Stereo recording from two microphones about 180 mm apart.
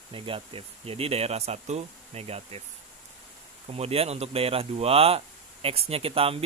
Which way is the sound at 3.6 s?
35° right (ahead or behind).